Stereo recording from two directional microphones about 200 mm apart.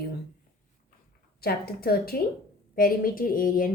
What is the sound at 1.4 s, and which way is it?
A woman's voice, 50° left (ahead or behind).